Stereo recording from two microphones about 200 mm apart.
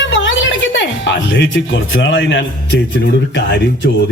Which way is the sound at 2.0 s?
65° left (ahead or behind).